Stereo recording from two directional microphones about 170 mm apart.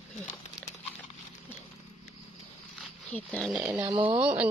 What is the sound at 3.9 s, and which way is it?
Speech, 30° right (ahead or behind).